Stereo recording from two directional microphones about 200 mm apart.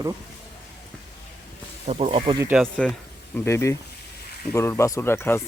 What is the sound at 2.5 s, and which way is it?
Speech, centre (ahead or behind).